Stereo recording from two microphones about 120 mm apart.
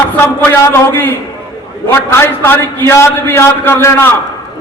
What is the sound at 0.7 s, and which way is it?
A man's voice, 15° left (ahead or behind).